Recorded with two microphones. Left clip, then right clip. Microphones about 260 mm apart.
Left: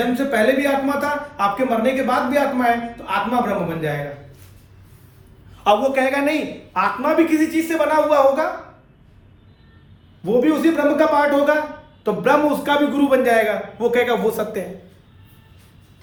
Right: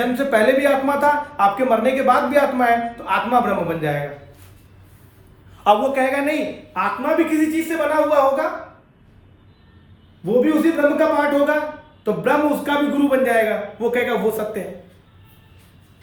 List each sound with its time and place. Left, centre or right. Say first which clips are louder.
0.1 s speech: right 4 dB; right
5.6 s a woman's voice: even; centre
6.7 s a man's voice: left 2 dB; centre
10.9 s a man's voice: left 1 dB; centre